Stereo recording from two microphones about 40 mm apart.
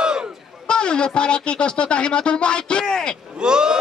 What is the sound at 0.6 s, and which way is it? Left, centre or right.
Speech, left.